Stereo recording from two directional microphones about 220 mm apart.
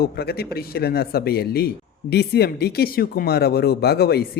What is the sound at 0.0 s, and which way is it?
Speech, 45° left (ahead or behind).